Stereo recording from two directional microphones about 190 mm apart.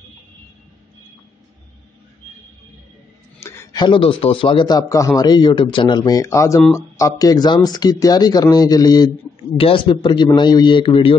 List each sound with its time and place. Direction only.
3.3 s a man's voice: 15° left (ahead or behind)